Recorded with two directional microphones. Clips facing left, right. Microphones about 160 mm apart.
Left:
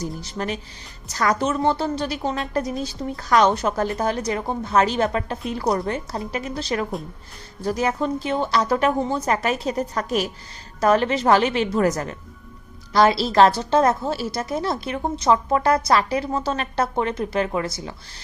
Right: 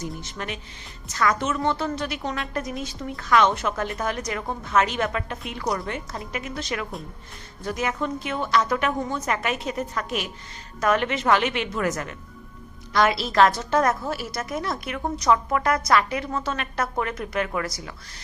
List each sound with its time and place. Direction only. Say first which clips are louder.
0.2 s a woman's voice: left 6 dB; 35° left (ahead or behind)